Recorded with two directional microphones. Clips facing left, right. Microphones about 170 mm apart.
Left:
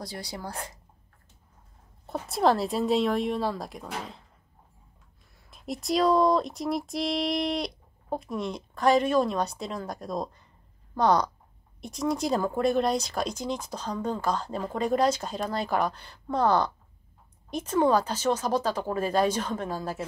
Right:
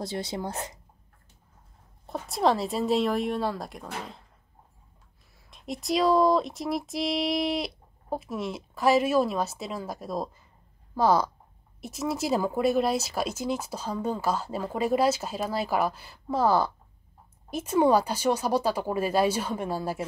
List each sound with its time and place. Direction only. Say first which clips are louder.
0.0 s a woman's voice: right 5 dB; 25° right (ahead or behind)
2.0 s speech: left 1 dB; centre (ahead or behind)
5.5 s speech: even; centre (ahead or behind)